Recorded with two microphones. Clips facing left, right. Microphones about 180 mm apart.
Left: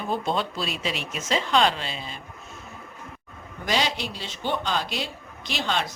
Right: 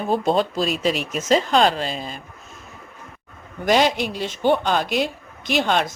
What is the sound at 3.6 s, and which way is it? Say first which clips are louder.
Speech: right 8 dB; 50° right (ahead or behind).